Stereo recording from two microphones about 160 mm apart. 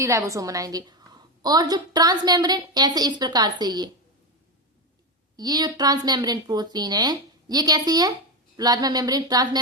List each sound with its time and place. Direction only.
0.0 s a woman's voice: 20° right (ahead or behind)
5.4 s a woman's voice: 25° right (ahead or behind)